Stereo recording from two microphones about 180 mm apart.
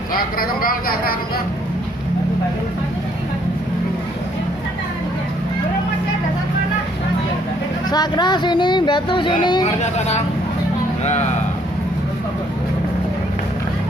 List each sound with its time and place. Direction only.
0.1 s speech: 55° left (ahead or behind)
7.9 s speech: 25° left (ahead or behind)
9.8 s speech: 40° left (ahead or behind)